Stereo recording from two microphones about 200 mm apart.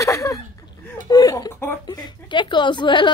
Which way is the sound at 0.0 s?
15° left (ahead or behind).